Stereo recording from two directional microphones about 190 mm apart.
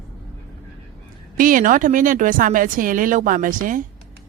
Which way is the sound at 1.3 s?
45° right (ahead or behind).